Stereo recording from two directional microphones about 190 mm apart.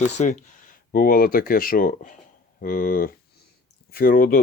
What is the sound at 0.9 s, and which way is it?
Speech, 50° left (ahead or behind).